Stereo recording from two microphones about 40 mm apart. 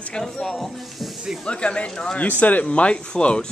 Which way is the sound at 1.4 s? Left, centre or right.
Left.